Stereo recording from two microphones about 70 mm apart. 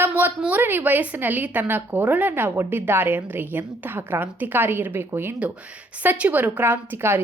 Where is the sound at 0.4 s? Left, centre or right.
Right.